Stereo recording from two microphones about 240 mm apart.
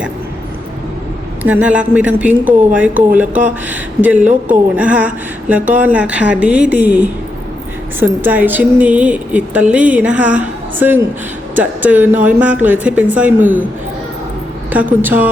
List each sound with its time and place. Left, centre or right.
1.5 s a woman's voice: centre
14.7 s a woman's voice: centre